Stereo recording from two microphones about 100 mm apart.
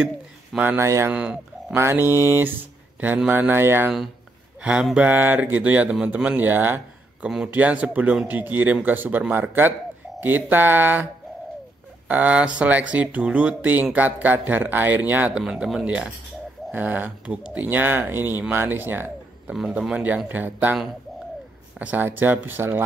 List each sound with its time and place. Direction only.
0.0 s a sound: 15° right (ahead or behind)
0.7 s speech: 30° right (ahead or behind)
1.1 s speech: 10° right (ahead or behind)
1.8 s speech: 25° right (ahead or behind)
4.6 s speech: 10° right (ahead or behind)
12.1 s speech: 15° right (ahead or behind)
15.4 s speech: 5° right (ahead or behind)
21.7 s speech: 15° right (ahead or behind)